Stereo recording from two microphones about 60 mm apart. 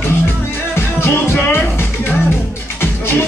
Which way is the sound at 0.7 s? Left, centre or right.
Left.